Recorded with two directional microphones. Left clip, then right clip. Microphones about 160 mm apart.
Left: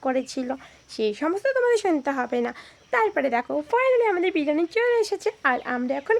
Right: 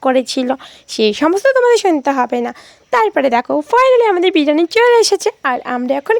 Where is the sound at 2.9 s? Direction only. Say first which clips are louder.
Right 10 dB; 60° right (ahead or behind).